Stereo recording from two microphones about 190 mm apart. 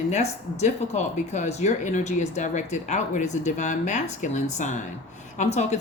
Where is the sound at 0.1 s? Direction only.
35° left (ahead or behind).